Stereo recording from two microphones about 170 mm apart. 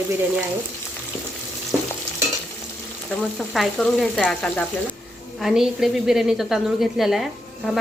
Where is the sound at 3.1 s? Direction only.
Centre (ahead or behind).